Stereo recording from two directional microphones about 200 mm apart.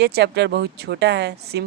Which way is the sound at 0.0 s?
55° right (ahead or behind).